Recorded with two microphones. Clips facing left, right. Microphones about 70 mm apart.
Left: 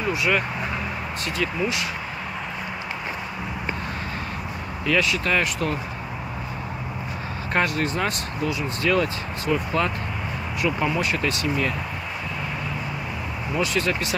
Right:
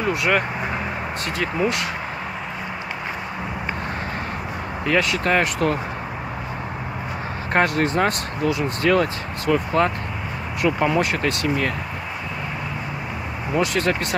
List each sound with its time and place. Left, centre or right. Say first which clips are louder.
0.0 s speech: right 2 dB; right
4.8 s speech: right 2 dB; right
7.5 s speech: right 4 dB; right
13.6 s speech: right 3 dB; right